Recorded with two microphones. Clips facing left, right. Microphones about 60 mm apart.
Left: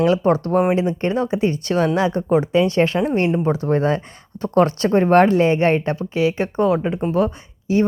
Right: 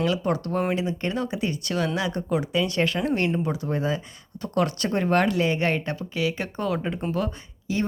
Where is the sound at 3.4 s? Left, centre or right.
Left.